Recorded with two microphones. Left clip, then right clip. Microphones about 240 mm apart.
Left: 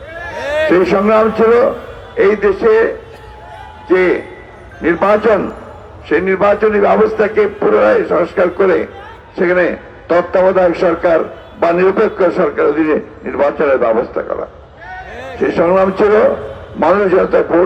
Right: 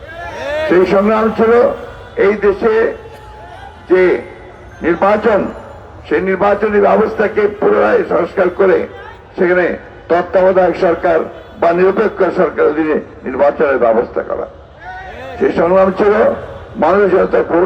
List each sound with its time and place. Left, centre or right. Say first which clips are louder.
0.3 s a sound: left 3 dB; left
0.7 s a man's voice: right 1 dB; left
15.4 s a man's voice: right 1 dB; left